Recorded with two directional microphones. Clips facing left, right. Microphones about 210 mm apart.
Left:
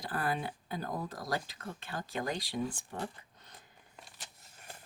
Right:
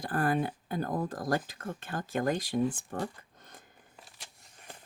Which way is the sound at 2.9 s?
50° right (ahead or behind).